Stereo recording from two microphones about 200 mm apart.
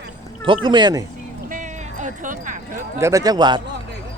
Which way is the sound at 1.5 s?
40° right (ahead or behind).